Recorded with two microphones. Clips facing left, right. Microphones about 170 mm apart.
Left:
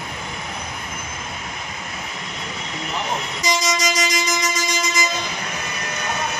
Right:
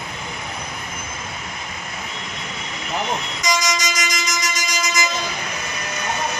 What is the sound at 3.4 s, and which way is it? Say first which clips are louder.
Vehicle: left 1 dB; 30° left (ahead or behind).